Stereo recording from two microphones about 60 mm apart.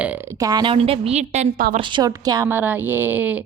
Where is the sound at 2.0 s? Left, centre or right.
Right.